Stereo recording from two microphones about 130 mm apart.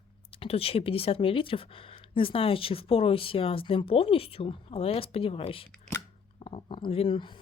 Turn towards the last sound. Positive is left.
turn(degrees=40)  # may be behind; listen again after turning